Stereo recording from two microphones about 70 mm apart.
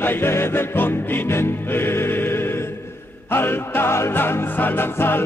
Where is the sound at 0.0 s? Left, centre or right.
Left.